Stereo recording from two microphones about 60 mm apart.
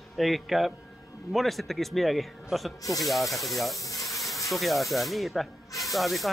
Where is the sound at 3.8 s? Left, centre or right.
Left.